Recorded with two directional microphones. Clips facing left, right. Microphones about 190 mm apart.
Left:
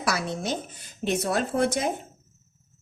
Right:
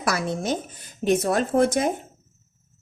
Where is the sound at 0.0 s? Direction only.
50° right (ahead or behind).